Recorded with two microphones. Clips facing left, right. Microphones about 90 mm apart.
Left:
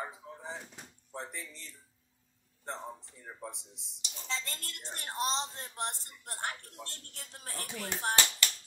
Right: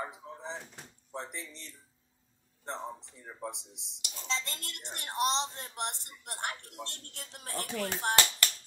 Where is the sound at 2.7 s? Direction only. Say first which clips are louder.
Right 2 dB; 20° right (ahead or behind).